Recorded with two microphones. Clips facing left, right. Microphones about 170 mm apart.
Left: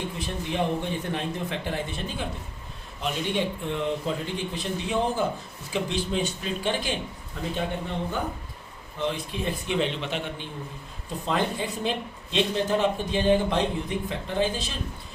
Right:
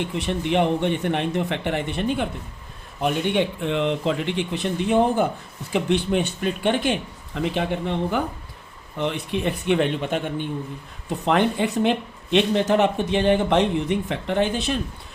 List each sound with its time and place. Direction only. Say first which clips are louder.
0.2 s speech: right 8 dB; 70° right (ahead or behind)
7.5 s speech: right 2 dB; 90° right
9.0 s speech: right 4 dB; 65° right (ahead or behind); by 10.4 s 50° right (ahead or behind)
11.3 s speech: right 7 dB; 65° right (ahead or behind)